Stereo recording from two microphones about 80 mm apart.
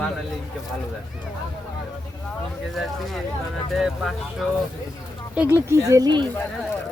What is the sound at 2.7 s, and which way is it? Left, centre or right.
Speech, centre.